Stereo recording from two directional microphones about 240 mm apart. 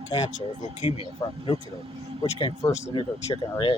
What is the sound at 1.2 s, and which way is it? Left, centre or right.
Speech, centre.